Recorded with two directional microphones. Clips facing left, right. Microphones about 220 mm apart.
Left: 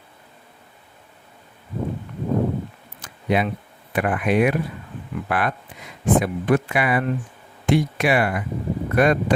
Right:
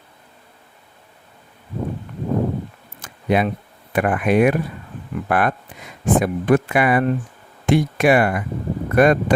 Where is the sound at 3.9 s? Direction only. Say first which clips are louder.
Right 3 dB; 50° right (ahead or behind).